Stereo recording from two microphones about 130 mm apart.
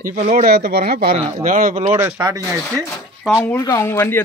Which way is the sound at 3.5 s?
25° left (ahead or behind).